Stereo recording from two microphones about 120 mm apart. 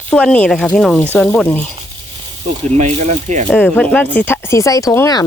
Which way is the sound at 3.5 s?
10° left (ahead or behind).